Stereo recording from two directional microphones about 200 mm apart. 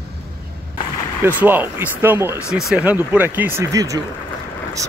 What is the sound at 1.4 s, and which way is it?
Speech, 10° right (ahead or behind).